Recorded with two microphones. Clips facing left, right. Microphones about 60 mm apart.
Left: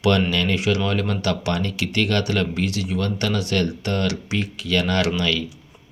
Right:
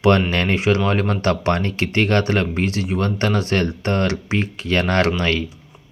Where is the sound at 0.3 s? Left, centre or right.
Right.